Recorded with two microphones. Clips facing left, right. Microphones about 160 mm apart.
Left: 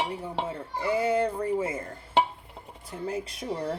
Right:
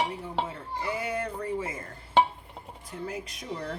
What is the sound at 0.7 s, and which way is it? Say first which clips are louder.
Dishes: left 7 dB; 30° left (ahead or behind).